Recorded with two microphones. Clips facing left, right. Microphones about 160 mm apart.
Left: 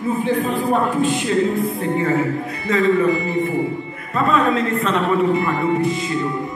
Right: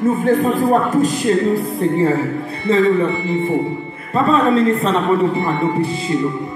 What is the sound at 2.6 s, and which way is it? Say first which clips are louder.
A man's voice: right 2 dB; 30° right (ahead or behind).